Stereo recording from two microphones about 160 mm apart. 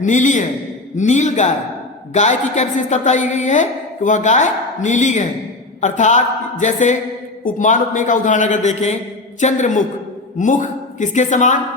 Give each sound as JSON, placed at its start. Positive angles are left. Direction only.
{"t": 0.0, "sound": "a woman's voice", "side_deg": 50}